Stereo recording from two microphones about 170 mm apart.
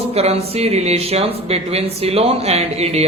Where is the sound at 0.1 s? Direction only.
35° right (ahead or behind).